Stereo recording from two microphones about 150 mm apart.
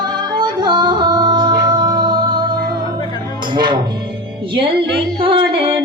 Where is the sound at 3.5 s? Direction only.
30° right (ahead or behind).